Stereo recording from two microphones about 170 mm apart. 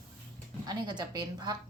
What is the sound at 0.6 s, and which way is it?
Speech, 25° right (ahead or behind).